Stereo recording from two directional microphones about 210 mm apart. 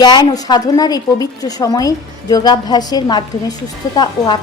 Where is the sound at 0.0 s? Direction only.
20° left (ahead or behind).